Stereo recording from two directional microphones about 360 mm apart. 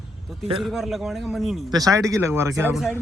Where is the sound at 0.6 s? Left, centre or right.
Centre.